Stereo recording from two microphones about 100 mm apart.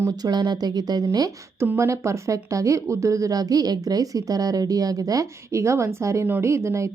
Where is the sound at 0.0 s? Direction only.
40° right (ahead or behind).